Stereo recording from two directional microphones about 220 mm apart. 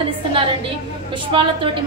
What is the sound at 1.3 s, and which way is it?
Speech, 25° right (ahead or behind).